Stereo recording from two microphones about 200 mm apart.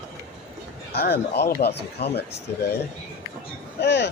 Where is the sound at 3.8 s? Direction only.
60° left (ahead or behind).